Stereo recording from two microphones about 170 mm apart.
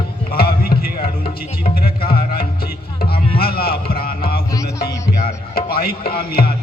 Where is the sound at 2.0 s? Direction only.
60° left (ahead or behind).